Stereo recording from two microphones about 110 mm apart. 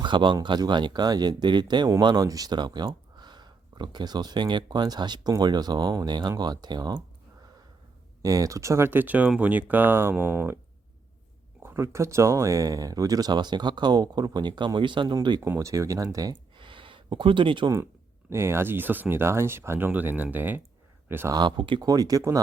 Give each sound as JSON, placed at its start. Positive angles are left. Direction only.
{"t": 0.0, "sound": "speech", "side_deg": -45}
{"t": 8.2, "sound": "speech", "side_deg": -30}
{"t": 11.6, "sound": "speech", "side_deg": -25}
{"t": 15.5, "sound": "speech", "side_deg": -30}
{"t": 16.6, "sound": "a sound", "side_deg": -50}
{"t": 18.3, "sound": "speech", "side_deg": -25}
{"t": 21.3, "sound": "speech", "side_deg": -45}
{"t": 21.8, "sound": "speech", "side_deg": -35}